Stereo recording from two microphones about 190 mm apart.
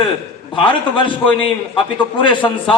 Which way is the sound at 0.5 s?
25° left (ahead or behind).